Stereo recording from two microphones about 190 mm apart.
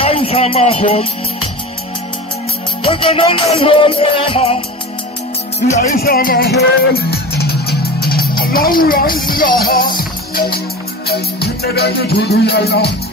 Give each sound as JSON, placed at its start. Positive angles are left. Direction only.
{"t": 0.0, "sound": "music", "side_deg": 30}
{"t": 2.8, "sound": "music", "side_deg": 30}
{"t": 5.7, "sound": "speech", "side_deg": 50}
{"t": 9.6, "sound": "music", "side_deg": 50}